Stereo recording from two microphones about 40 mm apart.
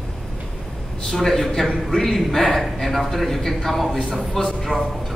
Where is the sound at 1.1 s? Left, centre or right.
Centre.